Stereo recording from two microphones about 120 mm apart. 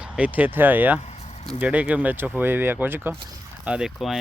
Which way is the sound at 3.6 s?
5° right (ahead or behind).